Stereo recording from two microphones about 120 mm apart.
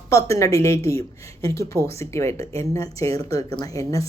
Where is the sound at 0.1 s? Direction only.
25° left (ahead or behind).